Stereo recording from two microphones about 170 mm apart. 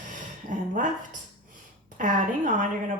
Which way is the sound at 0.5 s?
50° right (ahead or behind).